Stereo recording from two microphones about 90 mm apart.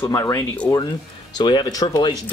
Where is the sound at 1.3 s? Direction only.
55° left (ahead or behind).